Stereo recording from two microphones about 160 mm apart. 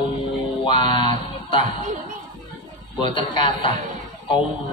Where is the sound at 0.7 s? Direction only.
30° left (ahead or behind).